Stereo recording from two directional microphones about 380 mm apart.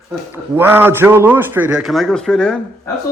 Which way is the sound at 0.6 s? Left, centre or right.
Centre.